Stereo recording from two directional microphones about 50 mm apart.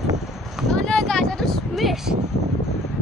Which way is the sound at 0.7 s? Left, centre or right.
Centre.